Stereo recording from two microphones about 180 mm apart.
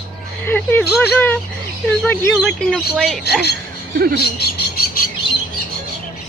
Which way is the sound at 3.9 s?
60° right (ahead or behind).